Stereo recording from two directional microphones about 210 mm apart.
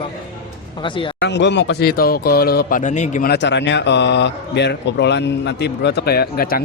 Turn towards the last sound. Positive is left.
turn(degrees=45)  # may be behind; listen again after turning